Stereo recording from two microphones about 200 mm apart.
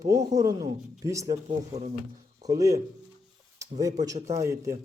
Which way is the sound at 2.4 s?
15° right (ahead or behind).